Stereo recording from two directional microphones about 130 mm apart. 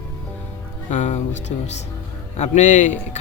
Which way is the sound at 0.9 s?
65° left (ahead or behind).